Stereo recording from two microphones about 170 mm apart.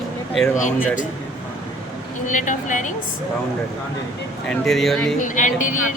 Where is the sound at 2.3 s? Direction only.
50° left (ahead or behind).